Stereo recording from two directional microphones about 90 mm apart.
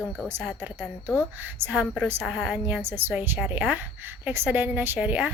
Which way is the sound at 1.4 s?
20° right (ahead or behind).